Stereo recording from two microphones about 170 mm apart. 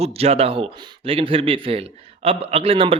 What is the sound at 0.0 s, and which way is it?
Speech, 35° right (ahead or behind).